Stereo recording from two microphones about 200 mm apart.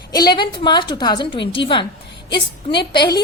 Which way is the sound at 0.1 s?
20° left (ahead or behind).